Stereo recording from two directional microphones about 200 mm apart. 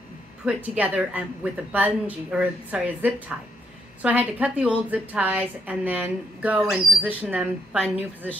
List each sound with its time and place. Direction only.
0.5 s a woman's voice: 5° right (ahead or behind)